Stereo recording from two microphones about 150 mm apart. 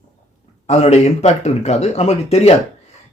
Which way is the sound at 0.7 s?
45° left (ahead or behind).